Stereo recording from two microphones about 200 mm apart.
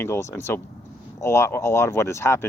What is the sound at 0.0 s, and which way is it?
Speech, 15° left (ahead or behind).